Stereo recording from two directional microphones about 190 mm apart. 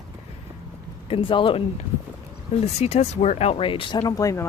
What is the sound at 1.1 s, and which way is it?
Speech, 25° left (ahead or behind).